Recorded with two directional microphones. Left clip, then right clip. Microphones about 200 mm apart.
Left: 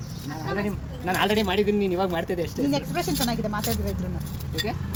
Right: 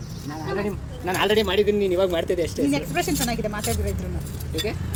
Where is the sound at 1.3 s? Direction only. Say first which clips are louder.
Right 3 dB; 50° left (ahead or behind); by 3.6 s 35° left (ahead or behind).